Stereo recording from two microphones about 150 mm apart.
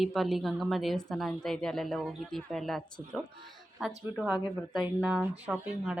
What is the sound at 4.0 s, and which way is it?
Speech, 10° right (ahead or behind).